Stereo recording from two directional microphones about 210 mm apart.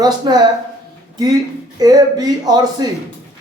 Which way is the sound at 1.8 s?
20° right (ahead or behind).